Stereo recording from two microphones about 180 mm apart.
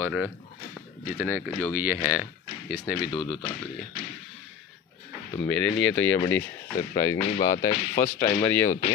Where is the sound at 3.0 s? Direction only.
25° left (ahead or behind).